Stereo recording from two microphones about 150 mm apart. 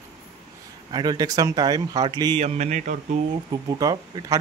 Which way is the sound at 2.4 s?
45° right (ahead or behind).